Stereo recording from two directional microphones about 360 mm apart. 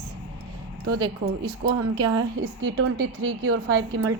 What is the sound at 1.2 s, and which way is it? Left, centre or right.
Speech, right.